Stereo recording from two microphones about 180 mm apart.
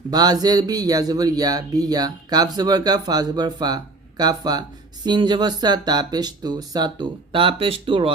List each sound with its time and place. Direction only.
0.1 s speech: 20° right (ahead or behind)